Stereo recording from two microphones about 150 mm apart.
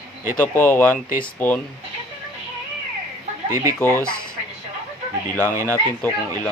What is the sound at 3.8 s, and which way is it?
Speech, 15° left (ahead or behind).